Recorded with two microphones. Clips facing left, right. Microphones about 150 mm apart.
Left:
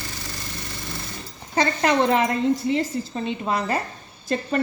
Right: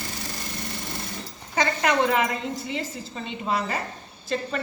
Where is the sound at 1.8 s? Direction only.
35° left (ahead or behind).